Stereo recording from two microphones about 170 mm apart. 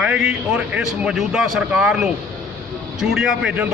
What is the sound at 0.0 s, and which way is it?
A man's voice, 5° right (ahead or behind).